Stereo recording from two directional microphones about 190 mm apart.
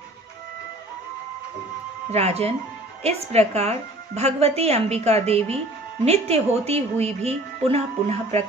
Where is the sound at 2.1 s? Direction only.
35° right (ahead or behind).